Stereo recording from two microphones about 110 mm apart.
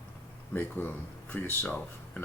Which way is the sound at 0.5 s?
15° left (ahead or behind).